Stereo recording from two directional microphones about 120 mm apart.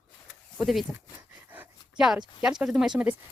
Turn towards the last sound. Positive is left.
turn(degrees=-5)  # may be behind; listen again after turning